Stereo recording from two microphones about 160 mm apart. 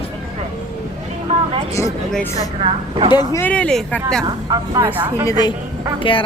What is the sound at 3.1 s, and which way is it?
Speech, 25° left (ahead or behind).